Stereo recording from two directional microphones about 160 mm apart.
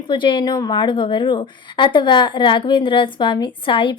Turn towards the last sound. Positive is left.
turn(degrees=30)  # may be behind; listen again after turning